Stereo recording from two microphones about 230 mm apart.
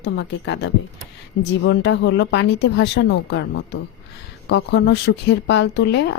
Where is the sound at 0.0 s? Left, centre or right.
Left.